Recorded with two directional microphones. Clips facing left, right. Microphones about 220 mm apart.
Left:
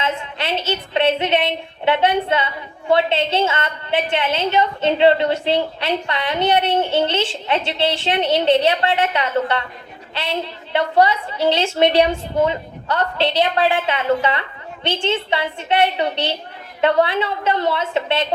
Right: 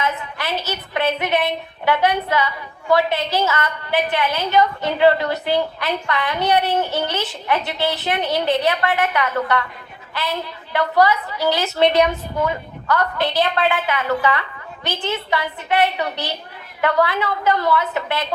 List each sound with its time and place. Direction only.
0.0 s a woman's voice: 25° left (ahead or behind)